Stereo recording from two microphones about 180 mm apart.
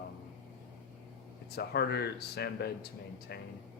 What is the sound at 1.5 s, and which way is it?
Speech, 65° left (ahead or behind).